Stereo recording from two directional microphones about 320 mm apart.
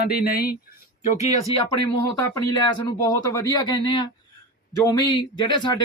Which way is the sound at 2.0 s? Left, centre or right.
Centre.